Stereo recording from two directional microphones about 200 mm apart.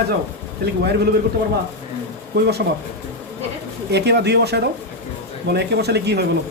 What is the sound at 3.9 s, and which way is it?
Speech, 55° right (ahead or behind).